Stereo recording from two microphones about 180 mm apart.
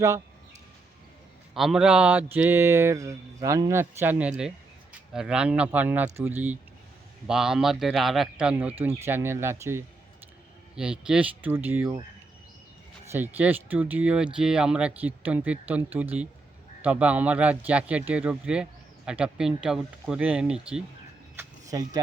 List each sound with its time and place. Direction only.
1.5 s speech: centre (ahead or behind)
13.1 s speech: 10° right (ahead or behind)
21.3 s a sound: 20° right (ahead or behind)